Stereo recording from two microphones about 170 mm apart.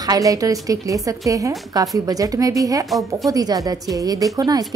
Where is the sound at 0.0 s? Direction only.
20° right (ahead or behind).